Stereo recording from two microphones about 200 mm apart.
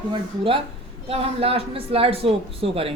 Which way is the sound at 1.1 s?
30° right (ahead or behind).